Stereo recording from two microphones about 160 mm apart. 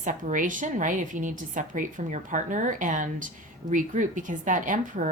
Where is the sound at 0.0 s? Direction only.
55° right (ahead or behind).